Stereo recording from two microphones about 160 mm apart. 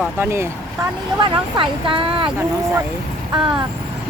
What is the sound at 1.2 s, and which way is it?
Speech, 30° right (ahead or behind).